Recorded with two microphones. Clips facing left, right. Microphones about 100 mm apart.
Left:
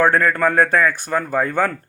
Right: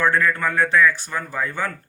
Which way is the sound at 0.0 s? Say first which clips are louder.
Left 4 dB; 50° left (ahead or behind).